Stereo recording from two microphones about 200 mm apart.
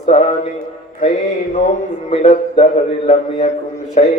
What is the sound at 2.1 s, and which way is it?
Mantra, 30° left (ahead or behind).